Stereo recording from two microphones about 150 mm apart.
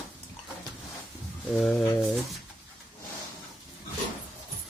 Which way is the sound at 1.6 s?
5° left (ahead or behind).